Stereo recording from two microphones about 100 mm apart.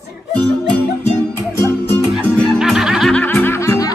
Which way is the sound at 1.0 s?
25° left (ahead or behind).